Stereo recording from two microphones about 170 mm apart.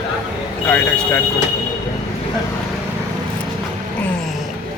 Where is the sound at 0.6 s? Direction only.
10° left (ahead or behind).